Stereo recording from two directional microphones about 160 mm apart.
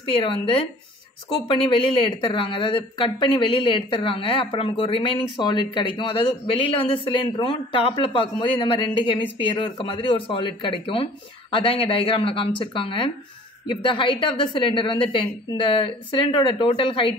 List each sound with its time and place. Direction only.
0.1 s a woman's voice: 35° left (ahead or behind)